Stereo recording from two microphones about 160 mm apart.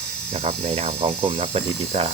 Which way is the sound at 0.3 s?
40° right (ahead or behind).